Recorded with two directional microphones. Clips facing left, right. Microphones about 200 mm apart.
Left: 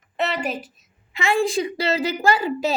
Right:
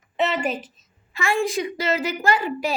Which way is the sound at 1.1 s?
25° left (ahead or behind).